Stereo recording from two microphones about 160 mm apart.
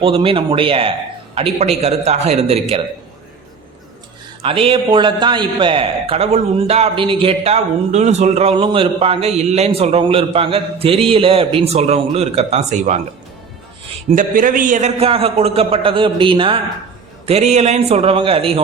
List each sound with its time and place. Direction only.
0.0 s a man's voice: 35° right (ahead or behind)
4.4 s a man's voice: 35° right (ahead or behind)
14.2 s a man's voice: 60° right (ahead or behind); by 18.6 s 35° right (ahead or behind)